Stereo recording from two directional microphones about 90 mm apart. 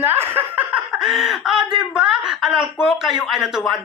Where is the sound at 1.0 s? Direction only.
5° right (ahead or behind).